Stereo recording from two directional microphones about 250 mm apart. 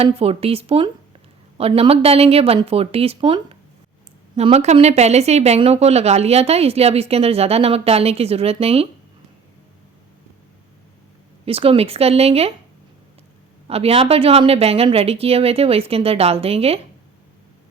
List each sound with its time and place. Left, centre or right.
0.0 s speech: right
11.4 s speech: right
13.7 s speech: right